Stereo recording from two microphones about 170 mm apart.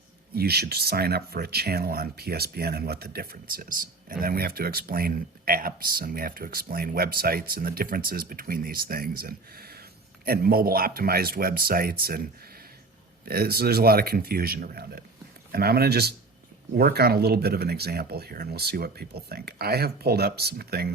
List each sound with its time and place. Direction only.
0.3 s speech: 65° right (ahead or behind)